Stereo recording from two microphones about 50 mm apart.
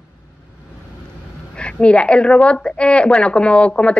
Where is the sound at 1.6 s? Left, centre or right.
Left.